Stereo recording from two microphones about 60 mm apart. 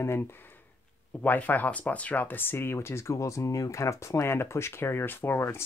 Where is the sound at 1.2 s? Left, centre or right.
Left.